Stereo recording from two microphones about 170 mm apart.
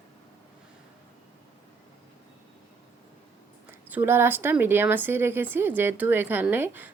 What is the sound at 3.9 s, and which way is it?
A woman's voice, 10° right (ahead or behind).